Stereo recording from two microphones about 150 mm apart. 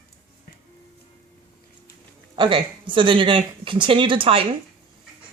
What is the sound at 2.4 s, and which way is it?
Speech, 35° right (ahead or behind).